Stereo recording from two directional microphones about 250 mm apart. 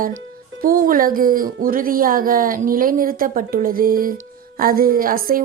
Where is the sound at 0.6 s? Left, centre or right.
Right.